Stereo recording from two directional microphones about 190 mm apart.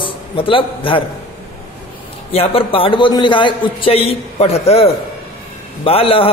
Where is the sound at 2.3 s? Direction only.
30° left (ahead or behind).